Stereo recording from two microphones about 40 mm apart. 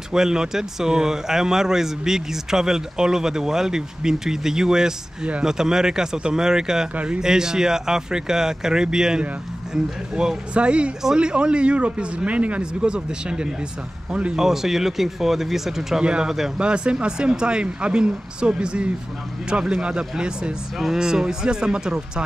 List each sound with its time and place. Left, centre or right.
0.1 s speech: centre
10.5 s speech: right
12.9 s speech: right
14.3 s speech: centre
16.0 s speech: right
16.3 s speech: centre
16.5 s speech: right